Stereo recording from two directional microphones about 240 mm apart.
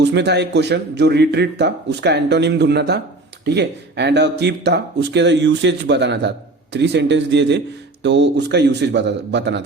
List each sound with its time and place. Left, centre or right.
0.0 s speech: right